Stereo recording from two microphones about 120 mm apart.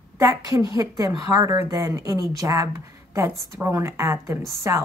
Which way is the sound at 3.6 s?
25° right (ahead or behind).